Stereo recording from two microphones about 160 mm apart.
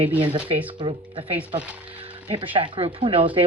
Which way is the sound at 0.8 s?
35° right (ahead or behind).